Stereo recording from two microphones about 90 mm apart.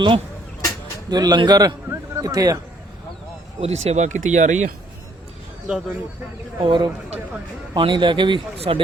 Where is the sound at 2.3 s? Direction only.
45° right (ahead or behind).